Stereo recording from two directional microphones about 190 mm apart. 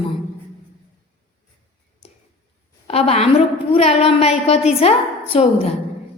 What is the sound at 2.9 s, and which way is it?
A woman's voice, 30° left (ahead or behind).